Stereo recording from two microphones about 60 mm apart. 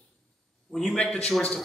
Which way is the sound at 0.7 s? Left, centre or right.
Centre.